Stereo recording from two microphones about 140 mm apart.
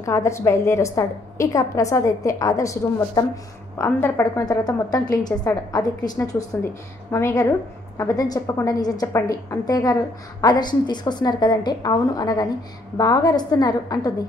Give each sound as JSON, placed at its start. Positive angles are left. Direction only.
{"t": 0.0, "sound": "a woman's voice", "side_deg": 20}
{"t": 4.5, "sound": "a woman's voice", "side_deg": 30}